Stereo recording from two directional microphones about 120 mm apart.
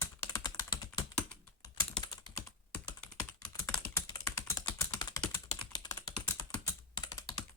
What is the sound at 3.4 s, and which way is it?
Typing, 30° left (ahead or behind).